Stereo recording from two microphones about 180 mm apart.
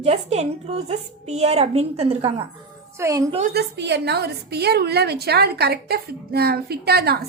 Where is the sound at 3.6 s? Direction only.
70° right (ahead or behind).